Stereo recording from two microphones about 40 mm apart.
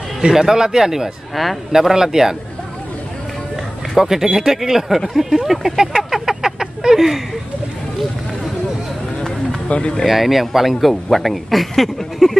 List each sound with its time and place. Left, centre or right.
0.3 s speech: centre
1.3 s speech: centre
1.7 s speech: centre
3.9 s speech: centre
6.0 s a sound: centre
9.7 s speech: left
10.0 s speech: centre